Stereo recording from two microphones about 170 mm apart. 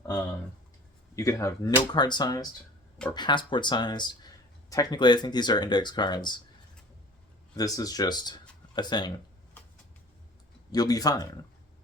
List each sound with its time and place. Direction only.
1.1 s speech: 20° left (ahead or behind)
7.5 s speech: 20° left (ahead or behind)
10.7 s speech: 20° left (ahead or behind)